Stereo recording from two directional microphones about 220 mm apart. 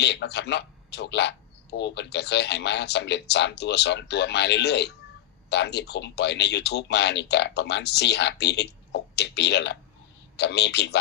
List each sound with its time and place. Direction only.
0.0 s speech: 50° left (ahead or behind)